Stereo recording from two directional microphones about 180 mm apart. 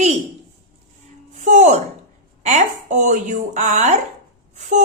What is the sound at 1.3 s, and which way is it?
A woman's voice, 40° right (ahead or behind).